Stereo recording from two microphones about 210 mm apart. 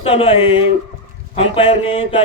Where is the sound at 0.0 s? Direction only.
25° left (ahead or behind).